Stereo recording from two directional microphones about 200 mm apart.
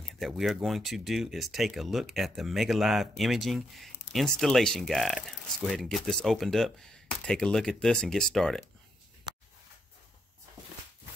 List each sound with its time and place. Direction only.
0.3 s speech: centre (ahead or behind)